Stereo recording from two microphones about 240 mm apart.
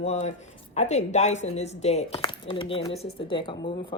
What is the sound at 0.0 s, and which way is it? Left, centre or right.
Speech, left.